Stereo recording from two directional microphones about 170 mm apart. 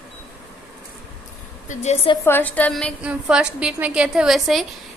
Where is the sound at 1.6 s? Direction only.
40° left (ahead or behind).